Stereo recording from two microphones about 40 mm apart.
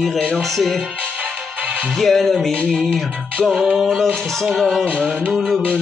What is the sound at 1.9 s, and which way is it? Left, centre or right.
Music, centre.